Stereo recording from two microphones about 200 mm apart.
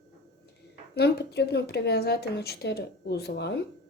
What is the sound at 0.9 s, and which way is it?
A woman's voice, 55° left (ahead or behind).